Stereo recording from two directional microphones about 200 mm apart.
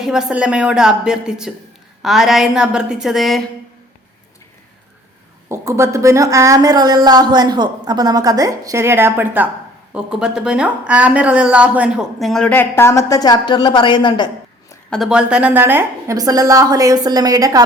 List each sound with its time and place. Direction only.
0.0 s a woman's voice: 5° right (ahead or behind)
5.5 s a woman's voice: 15° right (ahead or behind); by 14.3 s 25° left (ahead or behind)
14.8 s a woman's voice: centre (ahead or behind); by 17.6 s 15° right (ahead or behind)